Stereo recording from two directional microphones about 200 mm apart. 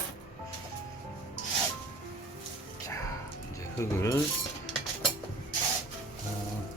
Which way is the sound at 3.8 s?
15° left (ahead or behind).